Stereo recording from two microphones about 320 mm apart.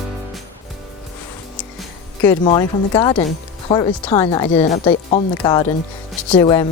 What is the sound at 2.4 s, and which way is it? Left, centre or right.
Speech, centre.